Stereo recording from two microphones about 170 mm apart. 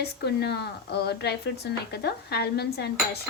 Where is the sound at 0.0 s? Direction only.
75° left (ahead or behind).